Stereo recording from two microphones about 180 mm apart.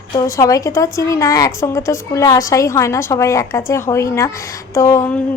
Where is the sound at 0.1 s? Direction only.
20° left (ahead or behind).